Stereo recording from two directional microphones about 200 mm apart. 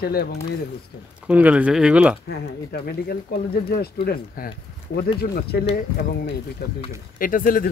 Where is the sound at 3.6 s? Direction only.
50° left (ahead or behind).